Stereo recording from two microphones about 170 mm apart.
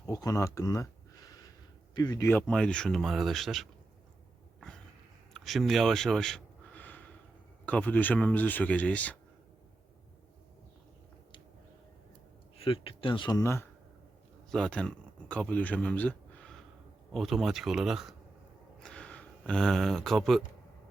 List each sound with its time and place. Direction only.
0.1 s speech: 20° left (ahead or behind)
2.0 s speech: 20° left (ahead or behind); by 3.7 s centre (ahead or behind)
5.3 s a sound: centre (ahead or behind)
7.6 s speech: 10° left (ahead or behind)
12.5 s speech: 35° left (ahead or behind)
13.4 s speech: 15° left (ahead or behind)
14.5 s speech: 5° left (ahead or behind)
18.8 s a sound: 5° left (ahead or behind)